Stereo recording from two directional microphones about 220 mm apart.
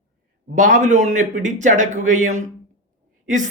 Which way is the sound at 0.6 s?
35° right (ahead or behind).